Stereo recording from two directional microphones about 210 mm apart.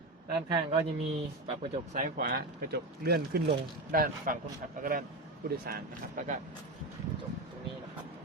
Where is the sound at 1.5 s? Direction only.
30° right (ahead or behind).